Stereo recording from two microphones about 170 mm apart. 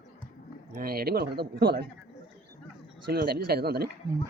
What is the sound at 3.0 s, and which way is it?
Speech, 65° right (ahead or behind).